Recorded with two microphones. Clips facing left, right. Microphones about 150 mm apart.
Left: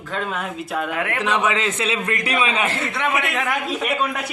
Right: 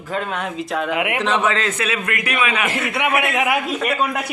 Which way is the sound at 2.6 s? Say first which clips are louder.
Right 2 dB; 15° right (ahead or behind).